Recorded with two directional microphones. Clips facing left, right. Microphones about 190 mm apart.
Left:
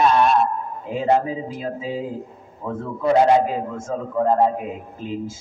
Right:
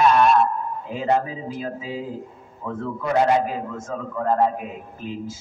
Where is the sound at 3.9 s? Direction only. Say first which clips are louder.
Left 4 dB; 25° left (ahead or behind).